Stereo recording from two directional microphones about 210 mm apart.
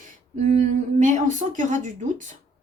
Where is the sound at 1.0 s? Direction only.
35° right (ahead or behind).